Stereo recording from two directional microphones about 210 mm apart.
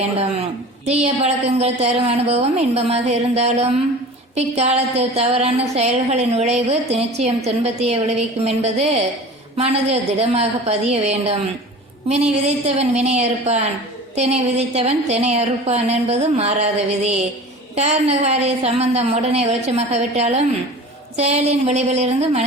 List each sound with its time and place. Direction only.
0.9 s a woman's voice: 30° right (ahead or behind)